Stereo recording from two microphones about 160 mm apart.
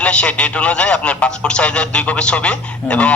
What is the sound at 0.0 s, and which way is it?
Speech, 5° left (ahead or behind).